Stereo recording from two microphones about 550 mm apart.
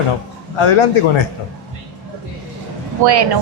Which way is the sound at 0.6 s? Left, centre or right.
Left.